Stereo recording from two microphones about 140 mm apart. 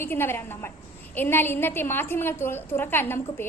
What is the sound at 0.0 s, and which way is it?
A woman's voice, 15° left (ahead or behind).